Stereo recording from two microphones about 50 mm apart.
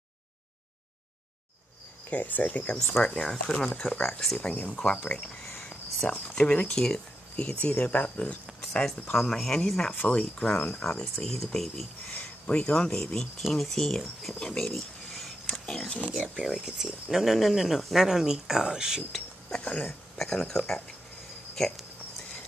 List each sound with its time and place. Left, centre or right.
2.0 s speech: left
2.9 s speech: centre
4.0 s speech: centre
4.4 s speech: left
6.8 s a sound: centre
7.6 s speech: left
9.1 s speech: centre
12.1 s speech: left
14.7 s a sound: centre
16.0 s speech: centre
16.3 s speech: centre
19.6 s speech: left
19.9 s speech: centre
21.5 s cricket: centre